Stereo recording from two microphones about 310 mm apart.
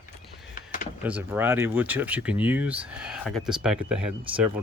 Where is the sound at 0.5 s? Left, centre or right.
Left.